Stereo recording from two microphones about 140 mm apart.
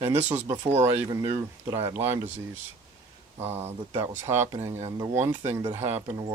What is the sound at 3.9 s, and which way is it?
Speech, 25° right (ahead or behind).